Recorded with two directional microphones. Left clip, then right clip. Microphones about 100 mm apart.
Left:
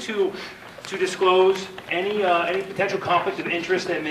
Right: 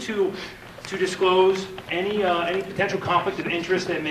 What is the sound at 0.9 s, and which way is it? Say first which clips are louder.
Speech: left 1 dB; 10° right (ahead or behind).